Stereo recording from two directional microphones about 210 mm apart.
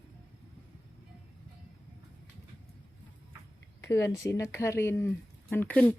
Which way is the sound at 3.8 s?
15° left (ahead or behind).